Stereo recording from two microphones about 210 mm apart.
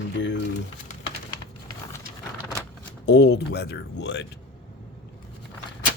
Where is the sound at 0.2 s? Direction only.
60° left (ahead or behind).